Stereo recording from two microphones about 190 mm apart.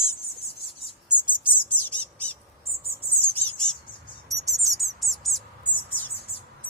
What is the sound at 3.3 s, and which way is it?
Bird, 5° left (ahead or behind).